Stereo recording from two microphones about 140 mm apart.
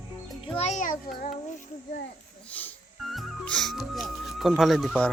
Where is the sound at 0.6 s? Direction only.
50° left (ahead or behind).